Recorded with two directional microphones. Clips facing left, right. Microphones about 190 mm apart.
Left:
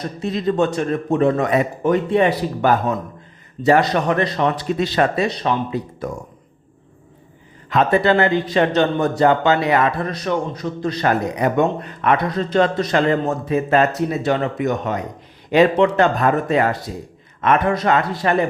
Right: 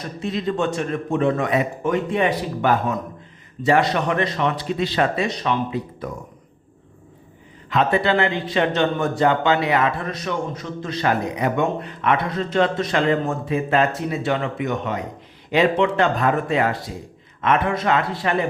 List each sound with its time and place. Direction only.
0.2 s a man's voice: 40° left (ahead or behind)
7.7 s a man's voice: 45° left (ahead or behind)